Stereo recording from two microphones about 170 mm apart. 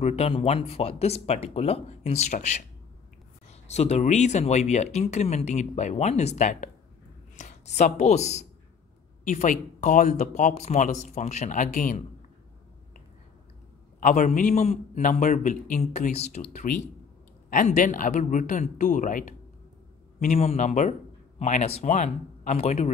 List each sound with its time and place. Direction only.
0.0 s speech: 40° left (ahead or behind)
13.9 s speech: 50° left (ahead or behind)
20.3 s speech: 40° left (ahead or behind)